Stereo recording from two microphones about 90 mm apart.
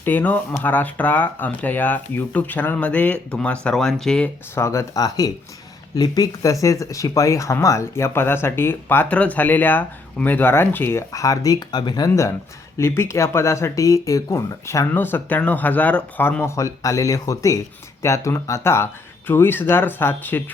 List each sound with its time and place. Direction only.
0.0 s speech: 20° left (ahead or behind)
4.5 s speech: 30° left (ahead or behind)
11.1 s speech: 40° left (ahead or behind)
12.7 s speech: 30° left (ahead or behind)
14.9 s speech: 20° left (ahead or behind)
16.6 s speech: 35° left (ahead or behind)